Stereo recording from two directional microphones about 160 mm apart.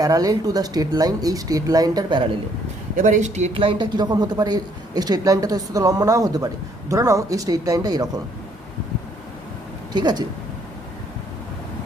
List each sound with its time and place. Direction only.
0.0 s speech: 20° right (ahead or behind)
2.9 s speech: 50° right (ahead or behind); by 8.1 s 20° right (ahead or behind)
9.9 s speech: 25° right (ahead or behind)